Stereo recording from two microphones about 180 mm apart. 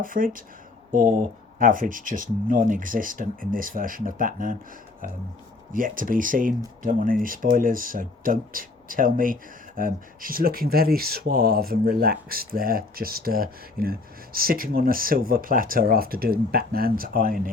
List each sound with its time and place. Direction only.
0.0 s speech: 50° right (ahead or behind)
1.5 s speech: 50° right (ahead or behind)
5.7 s speech: 50° right (ahead or behind)